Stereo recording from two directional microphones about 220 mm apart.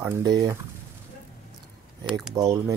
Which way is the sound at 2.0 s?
Centre (ahead or behind).